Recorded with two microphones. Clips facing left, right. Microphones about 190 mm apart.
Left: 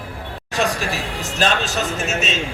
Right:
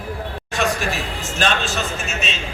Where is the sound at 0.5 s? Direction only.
35° left (ahead or behind).